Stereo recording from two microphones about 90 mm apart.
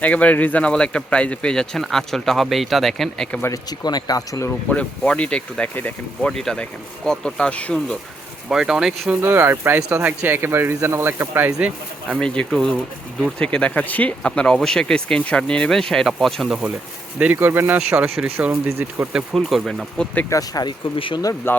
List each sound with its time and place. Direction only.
0.0 s speech: 15° left (ahead or behind)
3.5 s speech: 50° left (ahead or behind)
4.7 s speech: 15° left (ahead or behind)
6.3 s speech: 5° left (ahead or behind)
8.4 s speech: 5° right (ahead or behind)
9.2 s speech: 25° right (ahead or behind)
12.2 s speech: 10° left (ahead or behind)
17.3 s speech: 25° right (ahead or behind)
19.1 s speech: centre (ahead or behind)
20.3 s speech: 45° left (ahead or behind)
20.9 s speech: 75° left (ahead or behind)
21.5 s speech: 25° left (ahead or behind)